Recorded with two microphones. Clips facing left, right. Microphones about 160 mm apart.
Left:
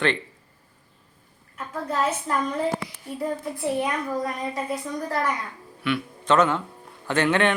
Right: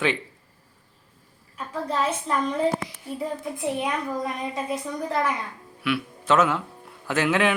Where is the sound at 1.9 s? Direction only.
5° left (ahead or behind).